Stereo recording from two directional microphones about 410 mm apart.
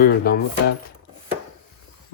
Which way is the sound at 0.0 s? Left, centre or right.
Left.